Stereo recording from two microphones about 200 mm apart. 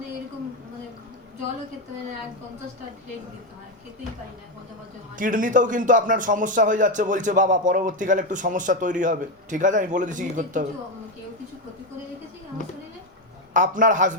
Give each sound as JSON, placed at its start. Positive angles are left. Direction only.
{"t": 5.1, "sound": "a man's voice", "side_deg": -40}
{"t": 13.5, "sound": "a man's voice", "side_deg": -40}